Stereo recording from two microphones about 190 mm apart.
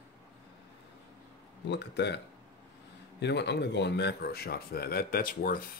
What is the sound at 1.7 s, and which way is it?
Speech, 60° left (ahead or behind).